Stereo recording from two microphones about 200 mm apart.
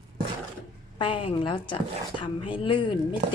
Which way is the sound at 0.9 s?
25° left (ahead or behind).